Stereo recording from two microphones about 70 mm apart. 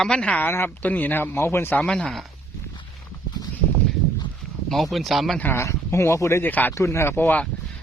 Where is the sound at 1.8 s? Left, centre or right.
Centre.